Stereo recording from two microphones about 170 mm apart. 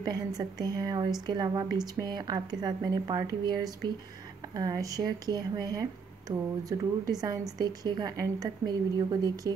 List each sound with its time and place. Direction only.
0.0 s a woman's voice: 25° right (ahead or behind)